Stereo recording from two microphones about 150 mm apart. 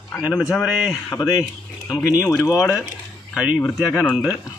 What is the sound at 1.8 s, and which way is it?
Speech, 25° left (ahead or behind).